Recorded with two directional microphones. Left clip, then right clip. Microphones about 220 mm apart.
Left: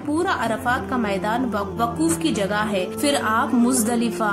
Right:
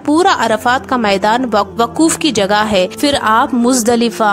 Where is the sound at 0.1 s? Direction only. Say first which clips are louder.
Right 11 dB; 45° right (ahead or behind).